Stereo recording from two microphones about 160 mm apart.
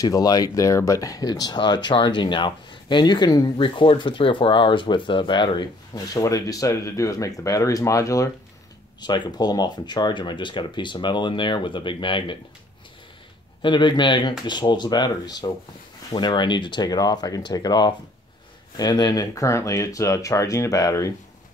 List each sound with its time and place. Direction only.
0.0 s speech: 25° left (ahead or behind)
13.6 s speech: 30° left (ahead or behind)